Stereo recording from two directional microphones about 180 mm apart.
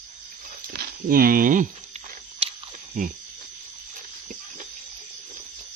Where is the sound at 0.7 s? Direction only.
50° right (ahead or behind).